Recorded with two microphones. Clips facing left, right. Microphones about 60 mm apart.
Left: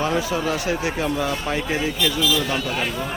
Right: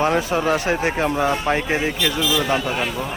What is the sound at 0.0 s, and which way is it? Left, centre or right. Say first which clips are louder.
Speech: right 3 dB; right.